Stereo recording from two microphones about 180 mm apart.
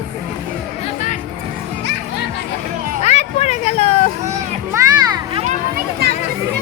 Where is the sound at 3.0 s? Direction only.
40° left (ahead or behind).